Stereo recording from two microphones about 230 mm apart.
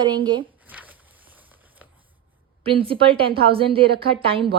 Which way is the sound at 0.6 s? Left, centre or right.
Centre.